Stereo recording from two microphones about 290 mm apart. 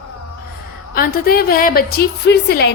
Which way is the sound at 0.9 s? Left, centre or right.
Left.